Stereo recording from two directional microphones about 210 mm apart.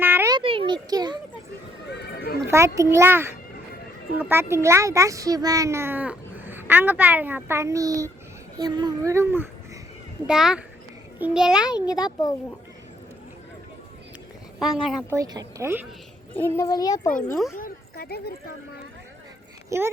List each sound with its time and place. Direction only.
0.0 s a sound: 10° right (ahead or behind)
1.9 s neigh: 50° left (ahead or behind)
2.5 s a child's voice: 15° right (ahead or behind)
11.9 s a child's voice: 20° left (ahead or behind)
15.1 s a child's voice: 15° right (ahead or behind)
16.3 s a child's voice: 10° left (ahead or behind)
17.1 s a child's voice: 40° left (ahead or behind)
17.6 s a sound: 45° left (ahead or behind)
19.7 s a child's voice: 15° right (ahead or behind)